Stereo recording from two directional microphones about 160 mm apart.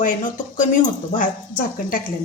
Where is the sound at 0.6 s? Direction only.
55° left (ahead or behind).